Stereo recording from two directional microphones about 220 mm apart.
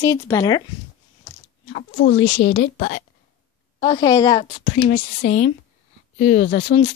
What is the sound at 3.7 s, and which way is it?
Speech, 20° left (ahead or behind).